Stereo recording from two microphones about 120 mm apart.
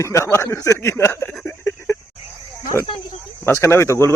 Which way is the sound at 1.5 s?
20° left (ahead or behind).